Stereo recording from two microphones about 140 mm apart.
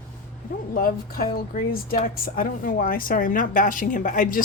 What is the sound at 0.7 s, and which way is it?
A woman's voice, 90° left.